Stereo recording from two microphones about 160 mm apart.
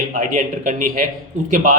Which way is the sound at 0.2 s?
50° right (ahead or behind).